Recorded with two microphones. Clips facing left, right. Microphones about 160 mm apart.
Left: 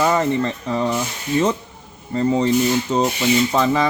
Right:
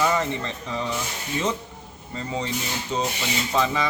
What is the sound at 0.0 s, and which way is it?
Speech, 50° left (ahead or behind).